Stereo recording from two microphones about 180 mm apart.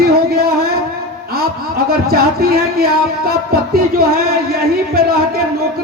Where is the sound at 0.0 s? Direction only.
60° right (ahead or behind).